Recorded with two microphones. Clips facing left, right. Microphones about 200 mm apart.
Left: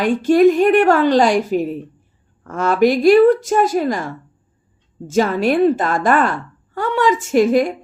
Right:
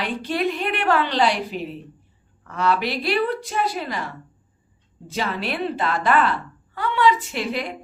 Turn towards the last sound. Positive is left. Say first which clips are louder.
# left 13 dB
turn(degrees=45)  # may be behind; listen again after turning